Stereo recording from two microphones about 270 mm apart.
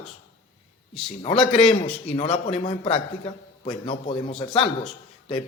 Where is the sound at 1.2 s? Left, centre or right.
Centre.